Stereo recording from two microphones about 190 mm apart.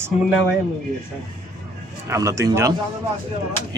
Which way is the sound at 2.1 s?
15° right (ahead or behind).